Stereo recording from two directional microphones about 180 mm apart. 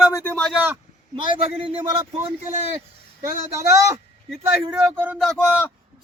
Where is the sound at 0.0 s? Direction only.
15° left (ahead or behind).